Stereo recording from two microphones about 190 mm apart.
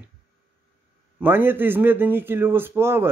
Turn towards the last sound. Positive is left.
turn(degrees=-10)  # may be behind; listen again after turning